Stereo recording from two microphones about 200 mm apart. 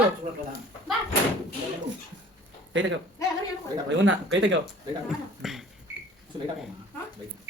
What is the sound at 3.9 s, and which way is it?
Speech, 65° right (ahead or behind).